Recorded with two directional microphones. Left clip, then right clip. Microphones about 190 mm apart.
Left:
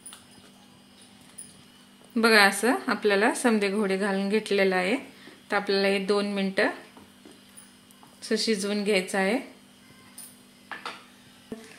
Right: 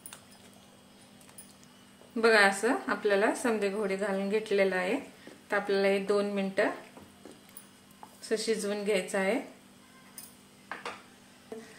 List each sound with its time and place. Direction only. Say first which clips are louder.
2.1 s a woman's voice: left 4 dB; 40° left (ahead or behind)
8.2 s a woman's voice: left 4 dB; 40° left (ahead or behind)